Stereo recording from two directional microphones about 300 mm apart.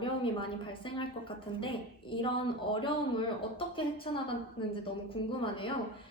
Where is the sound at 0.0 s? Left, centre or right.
Centre.